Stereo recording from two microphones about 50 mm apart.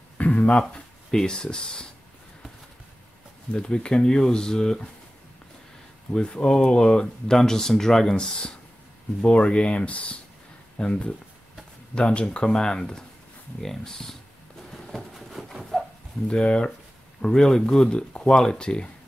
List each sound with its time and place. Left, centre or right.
0.4 s speech: centre
3.5 s speech: centre
6.1 s speech: centre
15.1 s a sound: centre
16.3 s speech: left